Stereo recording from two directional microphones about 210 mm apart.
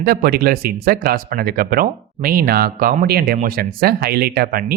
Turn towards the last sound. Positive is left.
turn(degrees=-45)  # may be behind; listen again after turning